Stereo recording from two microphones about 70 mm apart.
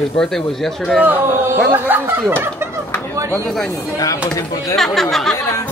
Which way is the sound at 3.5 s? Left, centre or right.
Centre.